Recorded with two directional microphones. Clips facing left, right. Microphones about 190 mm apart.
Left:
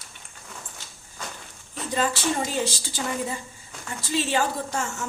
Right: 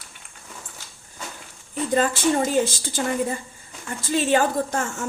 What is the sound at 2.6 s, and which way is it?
A woman's voice, 50° right (ahead or behind).